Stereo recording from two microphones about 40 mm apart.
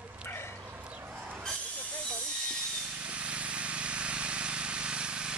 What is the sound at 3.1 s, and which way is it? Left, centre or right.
Vehicle, right.